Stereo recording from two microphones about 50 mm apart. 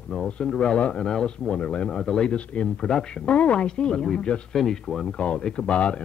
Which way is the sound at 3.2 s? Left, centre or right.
Left.